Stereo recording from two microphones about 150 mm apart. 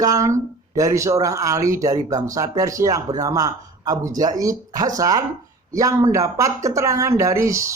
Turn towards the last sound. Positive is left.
turn(degrees=-20)  # may be behind; listen again after turning